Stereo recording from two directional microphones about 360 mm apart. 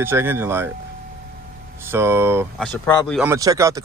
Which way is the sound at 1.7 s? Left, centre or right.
Centre.